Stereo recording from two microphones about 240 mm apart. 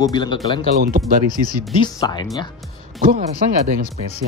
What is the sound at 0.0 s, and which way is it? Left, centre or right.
Speech, centre.